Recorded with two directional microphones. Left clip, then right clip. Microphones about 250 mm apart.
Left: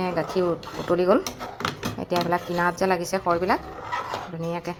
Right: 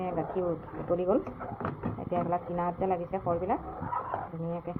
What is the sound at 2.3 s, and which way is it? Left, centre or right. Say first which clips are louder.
Speech: left 7 dB; left.